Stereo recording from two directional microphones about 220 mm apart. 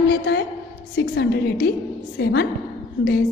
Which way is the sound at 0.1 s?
50° left (ahead or behind).